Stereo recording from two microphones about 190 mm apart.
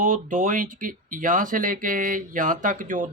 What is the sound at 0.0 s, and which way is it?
Speech, 45° right (ahead or behind).